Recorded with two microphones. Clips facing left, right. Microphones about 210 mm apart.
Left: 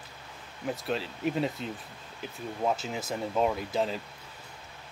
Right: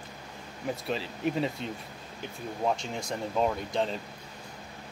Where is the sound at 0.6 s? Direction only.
Centre (ahead or behind).